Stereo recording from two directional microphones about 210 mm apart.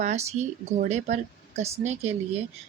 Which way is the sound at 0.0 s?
30° right (ahead or behind).